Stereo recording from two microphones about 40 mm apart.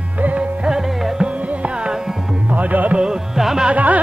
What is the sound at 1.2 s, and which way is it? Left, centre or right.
Music, right.